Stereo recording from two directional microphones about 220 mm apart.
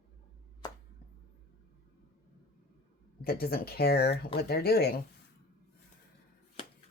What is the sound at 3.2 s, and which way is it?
Speech, 45° left (ahead or behind).